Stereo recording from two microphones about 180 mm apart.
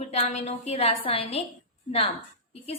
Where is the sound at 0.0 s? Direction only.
40° left (ahead or behind).